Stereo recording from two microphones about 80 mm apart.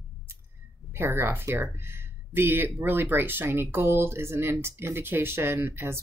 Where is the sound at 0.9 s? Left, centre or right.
Right.